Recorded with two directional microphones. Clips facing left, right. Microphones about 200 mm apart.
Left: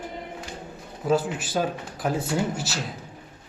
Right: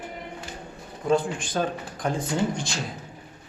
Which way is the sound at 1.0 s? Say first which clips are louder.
Even; 5° left (ahead or behind).